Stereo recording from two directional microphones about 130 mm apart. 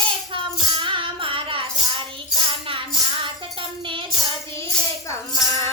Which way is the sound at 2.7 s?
40° right (ahead or behind).